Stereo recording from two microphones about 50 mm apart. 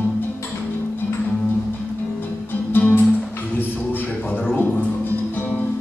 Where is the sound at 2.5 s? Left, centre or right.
Left.